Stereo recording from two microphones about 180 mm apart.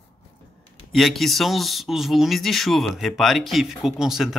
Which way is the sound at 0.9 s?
Centre (ahead or behind).